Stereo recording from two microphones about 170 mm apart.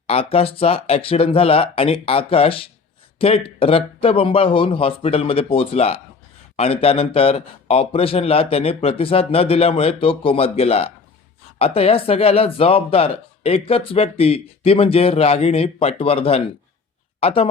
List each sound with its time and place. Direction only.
0.1 s speech: 35° left (ahead or behind)